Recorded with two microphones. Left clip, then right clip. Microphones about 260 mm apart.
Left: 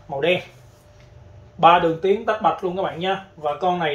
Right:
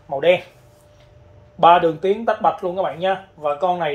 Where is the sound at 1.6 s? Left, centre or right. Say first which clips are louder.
Right 2 dB; right.